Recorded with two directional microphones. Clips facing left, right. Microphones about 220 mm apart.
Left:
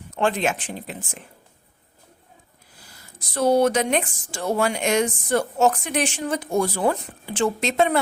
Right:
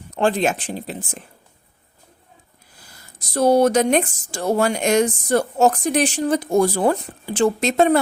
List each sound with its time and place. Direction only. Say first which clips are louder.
0.2 s speech: right 3 dB; 35° right (ahead or behind)
3.2 s speech: right 3 dB; 40° right (ahead or behind)